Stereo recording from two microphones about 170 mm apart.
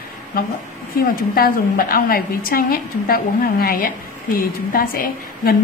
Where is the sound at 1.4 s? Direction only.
60° left (ahead or behind).